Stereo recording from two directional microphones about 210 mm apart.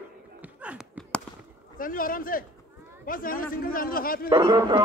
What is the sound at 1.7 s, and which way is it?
Speech, 40° left (ahead or behind).